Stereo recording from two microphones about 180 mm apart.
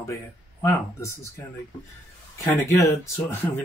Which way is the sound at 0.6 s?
15° left (ahead or behind).